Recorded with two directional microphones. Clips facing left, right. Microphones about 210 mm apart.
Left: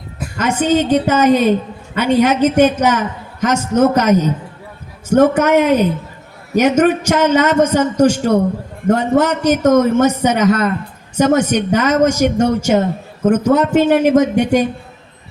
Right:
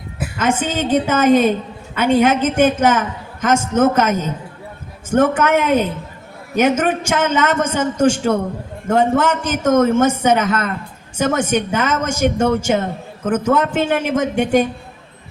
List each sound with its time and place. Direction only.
0.3 s a man's voice: 50° right (ahead or behind)